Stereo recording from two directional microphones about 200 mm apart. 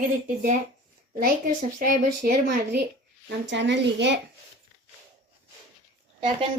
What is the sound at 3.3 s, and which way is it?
Speech, 60° right (ahead or behind).